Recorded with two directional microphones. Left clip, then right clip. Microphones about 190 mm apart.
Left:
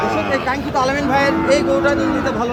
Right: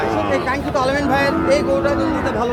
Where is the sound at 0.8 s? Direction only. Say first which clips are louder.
Left 1 dB; 35° left (ahead or behind).